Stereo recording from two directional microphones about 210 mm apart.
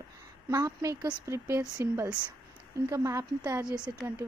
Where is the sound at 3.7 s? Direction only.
5° right (ahead or behind).